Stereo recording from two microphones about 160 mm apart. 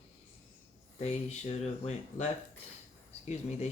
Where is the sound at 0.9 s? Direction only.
45° left (ahead or behind).